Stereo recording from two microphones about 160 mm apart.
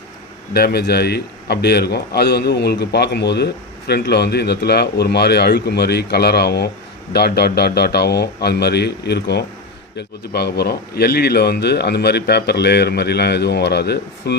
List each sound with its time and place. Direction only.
0.5 s a man's voice: 85° left